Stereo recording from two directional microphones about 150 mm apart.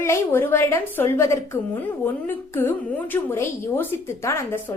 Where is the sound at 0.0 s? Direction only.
15° left (ahead or behind).